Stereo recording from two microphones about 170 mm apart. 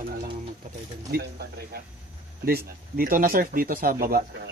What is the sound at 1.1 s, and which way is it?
Speech, 70° right (ahead or behind).